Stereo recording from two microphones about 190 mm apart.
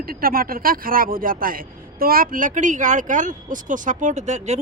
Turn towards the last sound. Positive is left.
turn(degrees=-40)  # may be behind; listen again after turning